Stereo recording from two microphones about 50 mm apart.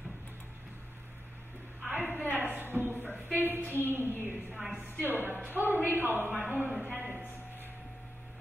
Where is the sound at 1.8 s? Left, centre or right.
Right.